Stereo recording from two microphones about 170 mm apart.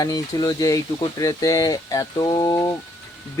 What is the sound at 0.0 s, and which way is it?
Speech, 20° left (ahead or behind).